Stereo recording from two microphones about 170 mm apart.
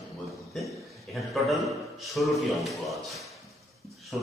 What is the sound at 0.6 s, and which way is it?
A man's voice, centre (ahead or behind).